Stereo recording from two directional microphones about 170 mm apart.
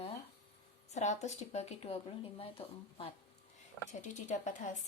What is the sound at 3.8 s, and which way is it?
Speech, 45° left (ahead or behind).